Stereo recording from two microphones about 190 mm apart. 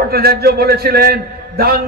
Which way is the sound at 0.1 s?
55° right (ahead or behind).